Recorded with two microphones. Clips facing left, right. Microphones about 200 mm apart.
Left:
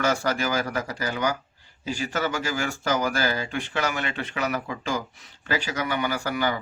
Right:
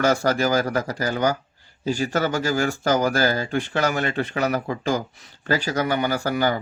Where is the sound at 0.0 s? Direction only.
40° right (ahead or behind).